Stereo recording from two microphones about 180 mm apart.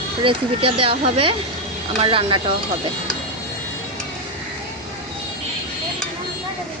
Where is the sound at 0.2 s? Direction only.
30° right (ahead or behind).